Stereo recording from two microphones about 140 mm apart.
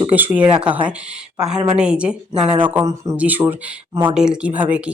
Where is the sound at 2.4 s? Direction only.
35° right (ahead or behind).